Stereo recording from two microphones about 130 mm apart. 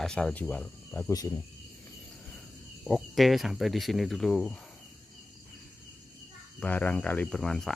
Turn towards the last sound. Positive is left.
turn(degrees=5)  # may be behind; listen again after turning